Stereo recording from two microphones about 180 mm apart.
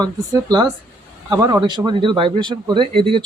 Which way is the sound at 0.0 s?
25° right (ahead or behind).